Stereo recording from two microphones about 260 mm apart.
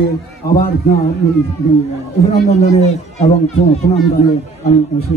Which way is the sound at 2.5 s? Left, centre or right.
Left.